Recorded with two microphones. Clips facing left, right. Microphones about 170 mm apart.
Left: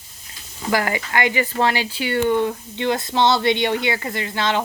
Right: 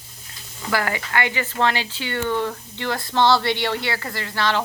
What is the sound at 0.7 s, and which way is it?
Speech, 15° left (ahead or behind).